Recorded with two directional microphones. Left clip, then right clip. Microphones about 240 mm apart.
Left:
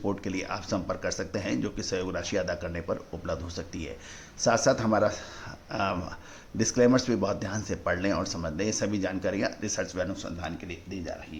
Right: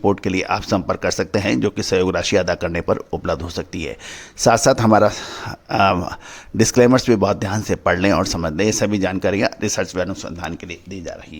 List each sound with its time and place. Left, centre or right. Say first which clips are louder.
0.0 s speech: right 13 dB; right